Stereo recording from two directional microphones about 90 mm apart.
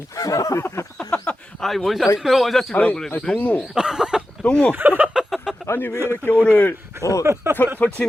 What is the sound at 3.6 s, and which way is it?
Speech, 5° right (ahead or behind).